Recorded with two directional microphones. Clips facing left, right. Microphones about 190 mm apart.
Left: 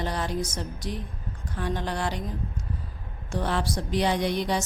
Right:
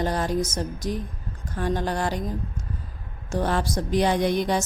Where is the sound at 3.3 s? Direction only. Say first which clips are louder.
Right 3 dB; 45° right (ahead or behind).